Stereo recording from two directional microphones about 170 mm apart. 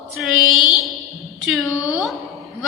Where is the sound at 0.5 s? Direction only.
25° left (ahead or behind).